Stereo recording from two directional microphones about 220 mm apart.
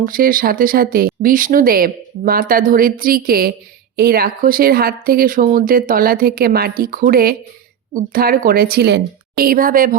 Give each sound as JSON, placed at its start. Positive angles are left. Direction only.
{"t": 0.0, "sound": "speech", "side_deg": -40}